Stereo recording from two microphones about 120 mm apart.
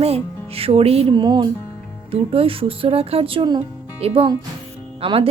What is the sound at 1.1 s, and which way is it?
Speech, 40° right (ahead or behind).